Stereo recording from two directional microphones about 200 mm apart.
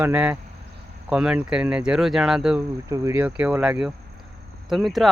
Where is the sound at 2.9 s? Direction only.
15° right (ahead or behind).